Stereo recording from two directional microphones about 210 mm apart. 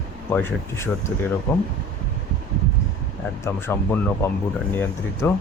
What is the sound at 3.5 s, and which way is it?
Speech, 10° left (ahead or behind).